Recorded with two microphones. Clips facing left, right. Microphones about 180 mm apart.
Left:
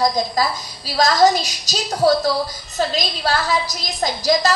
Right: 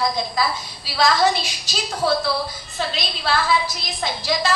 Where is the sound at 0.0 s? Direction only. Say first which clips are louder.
Left 4 dB; 40° left (ahead or behind).